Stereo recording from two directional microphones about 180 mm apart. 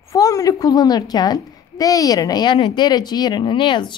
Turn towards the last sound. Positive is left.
turn(degrees=25)  # may be behind; listen again after turning